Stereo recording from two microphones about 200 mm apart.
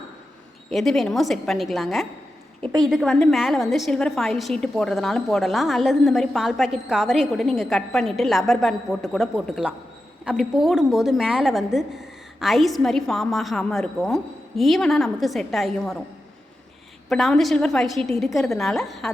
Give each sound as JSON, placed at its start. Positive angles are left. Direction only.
{"t": 0.7, "sound": "a woman's voice", "side_deg": 0}
{"t": 2.6, "sound": "a woman's voice", "side_deg": -30}
{"t": 2.8, "sound": "a woman's voice", "side_deg": 0}
{"t": 17.1, "sound": "a woman's voice", "side_deg": 0}